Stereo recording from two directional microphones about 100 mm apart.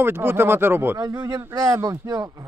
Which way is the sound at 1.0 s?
40° right (ahead or behind).